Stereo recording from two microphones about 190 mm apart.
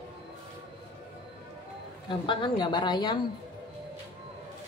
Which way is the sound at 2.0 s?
25° left (ahead or behind).